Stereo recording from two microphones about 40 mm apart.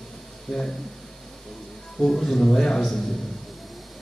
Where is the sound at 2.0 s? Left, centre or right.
Centre.